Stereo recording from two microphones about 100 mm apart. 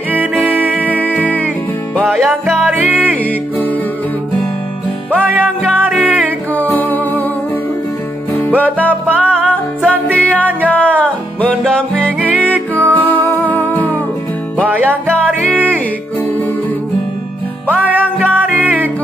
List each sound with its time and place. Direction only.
0.5 s music: 15° right (ahead or behind)
0.8 s music: 15° left (ahead or behind)
2.0 s music: 5° left (ahead or behind)
2.7 s music: 20° right (ahead or behind)
5.1 s music: 20° right (ahead or behind)
6.2 s music: 15° left (ahead or behind)
8.4 s music: 15° left (ahead or behind)
14.7 s music: 20° right (ahead or behind)
17.6 s music: 15° right (ahead or behind)